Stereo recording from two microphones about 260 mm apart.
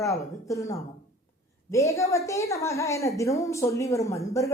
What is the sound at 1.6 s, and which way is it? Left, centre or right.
Speech, centre.